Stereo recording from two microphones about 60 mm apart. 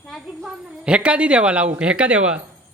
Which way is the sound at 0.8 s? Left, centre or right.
Centre.